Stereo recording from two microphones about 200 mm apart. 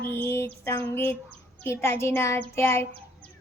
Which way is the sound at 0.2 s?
10° left (ahead or behind).